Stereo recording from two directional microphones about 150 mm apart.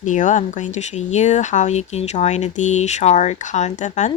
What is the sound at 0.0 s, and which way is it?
Speech, 55° left (ahead or behind).